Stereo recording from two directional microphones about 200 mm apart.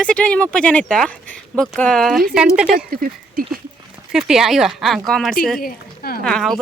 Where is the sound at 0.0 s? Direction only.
5° left (ahead or behind).